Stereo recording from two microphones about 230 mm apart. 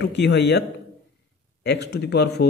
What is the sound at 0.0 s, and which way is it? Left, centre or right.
Speech, left.